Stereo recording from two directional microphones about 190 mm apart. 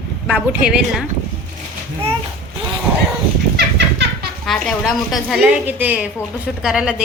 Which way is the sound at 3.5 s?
65° right (ahead or behind).